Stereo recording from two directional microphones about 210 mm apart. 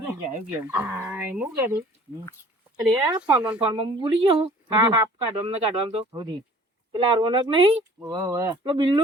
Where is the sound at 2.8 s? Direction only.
20° right (ahead or behind).